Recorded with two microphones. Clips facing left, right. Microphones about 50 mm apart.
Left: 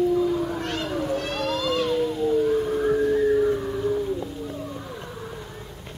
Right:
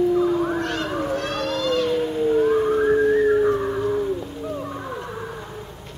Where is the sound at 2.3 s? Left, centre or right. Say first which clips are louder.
Right 4 dB; right.